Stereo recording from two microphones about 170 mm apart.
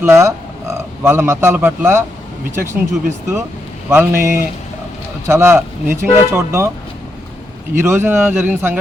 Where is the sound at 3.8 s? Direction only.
15° right (ahead or behind).